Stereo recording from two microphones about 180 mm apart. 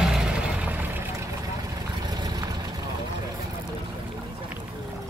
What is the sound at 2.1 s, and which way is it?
Vehicle, 20° right (ahead or behind).